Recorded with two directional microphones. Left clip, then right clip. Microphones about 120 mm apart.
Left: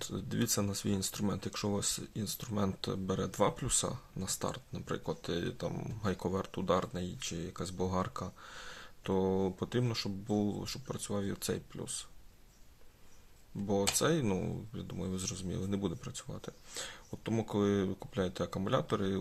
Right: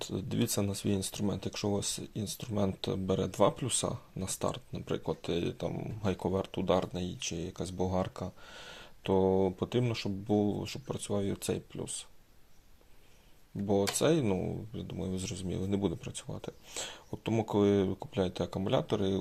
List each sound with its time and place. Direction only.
0.0 s speech: 15° right (ahead or behind)
13.7 s speech: 10° right (ahead or behind)
14.3 s speech: centre (ahead or behind)